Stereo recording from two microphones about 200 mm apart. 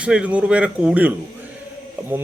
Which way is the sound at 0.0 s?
5° right (ahead or behind).